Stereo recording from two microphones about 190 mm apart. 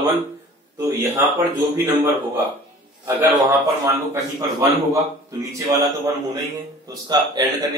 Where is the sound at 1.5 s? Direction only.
15° right (ahead or behind).